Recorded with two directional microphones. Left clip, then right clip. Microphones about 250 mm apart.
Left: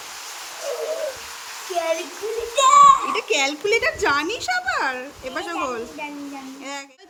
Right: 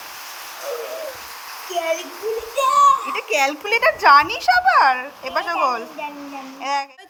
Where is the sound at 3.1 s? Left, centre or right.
Centre.